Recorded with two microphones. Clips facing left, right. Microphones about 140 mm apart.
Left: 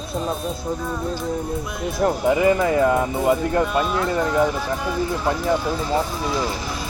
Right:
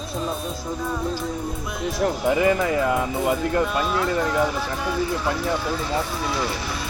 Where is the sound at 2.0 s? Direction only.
40° left (ahead or behind).